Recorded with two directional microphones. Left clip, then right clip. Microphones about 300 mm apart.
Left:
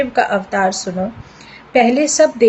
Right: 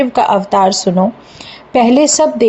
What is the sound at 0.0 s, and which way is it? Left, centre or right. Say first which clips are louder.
Speech: right 4 dB; right.